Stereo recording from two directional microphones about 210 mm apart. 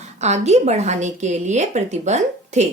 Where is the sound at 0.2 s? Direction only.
30° right (ahead or behind).